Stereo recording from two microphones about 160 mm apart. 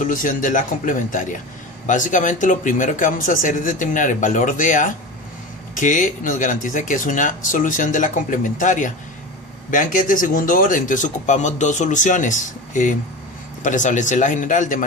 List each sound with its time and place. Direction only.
0.0 s speech: 55° left (ahead or behind)